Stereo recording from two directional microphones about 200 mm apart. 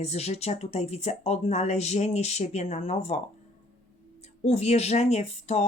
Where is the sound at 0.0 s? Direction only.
30° left (ahead or behind).